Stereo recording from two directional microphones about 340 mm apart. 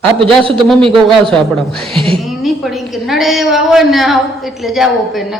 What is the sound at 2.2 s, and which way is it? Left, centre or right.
A woman's voice, centre.